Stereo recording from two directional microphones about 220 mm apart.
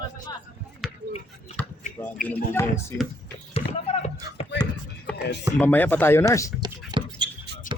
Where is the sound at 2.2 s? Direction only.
10° left (ahead or behind).